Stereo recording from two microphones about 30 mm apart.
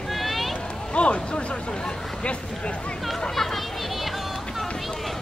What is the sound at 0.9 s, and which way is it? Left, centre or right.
Speech, left.